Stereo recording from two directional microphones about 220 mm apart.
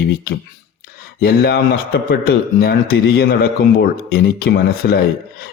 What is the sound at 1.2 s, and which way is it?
A man's voice, 45° left (ahead or behind).